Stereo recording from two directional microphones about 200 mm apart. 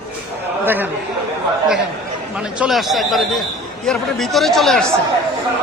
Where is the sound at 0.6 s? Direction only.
10° right (ahead or behind).